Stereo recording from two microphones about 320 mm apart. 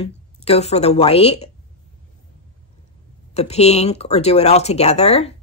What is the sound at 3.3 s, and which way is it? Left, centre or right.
A woman's voice, centre.